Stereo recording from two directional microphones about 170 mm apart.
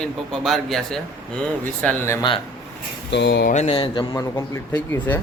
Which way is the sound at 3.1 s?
90° left.